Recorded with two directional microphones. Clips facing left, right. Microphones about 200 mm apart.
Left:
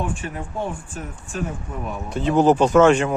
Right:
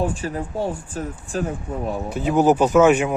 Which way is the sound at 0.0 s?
35° right (ahead or behind).